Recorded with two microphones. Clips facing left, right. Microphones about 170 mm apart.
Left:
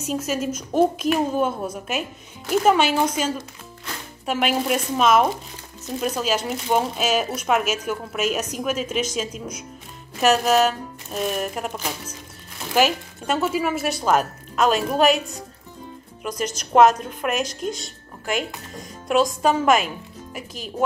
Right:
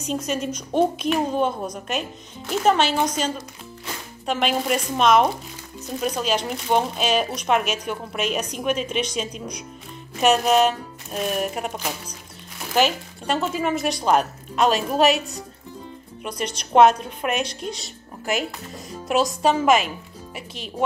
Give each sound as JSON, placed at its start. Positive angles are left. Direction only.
{"t": 0.0, "sound": "speech", "side_deg": 5}
{"t": 4.3, "sound": "speech", "side_deg": 5}
{"t": 16.3, "sound": "a woman's voice", "side_deg": 45}
{"t": 16.7, "sound": "speech", "side_deg": 0}